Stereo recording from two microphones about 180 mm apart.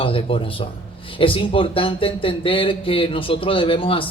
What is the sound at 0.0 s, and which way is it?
Speech, 30° left (ahead or behind).